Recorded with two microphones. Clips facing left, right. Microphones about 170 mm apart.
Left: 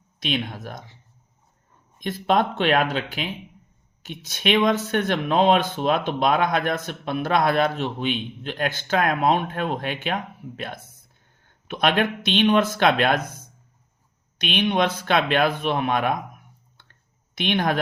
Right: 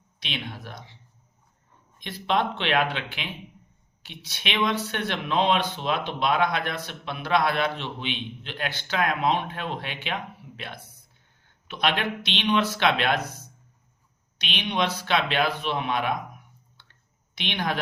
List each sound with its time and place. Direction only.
0.2 s speech: 45° left (ahead or behind)
2.0 s speech: 45° left (ahead or behind)
16.7 s clicking: 50° left (ahead or behind)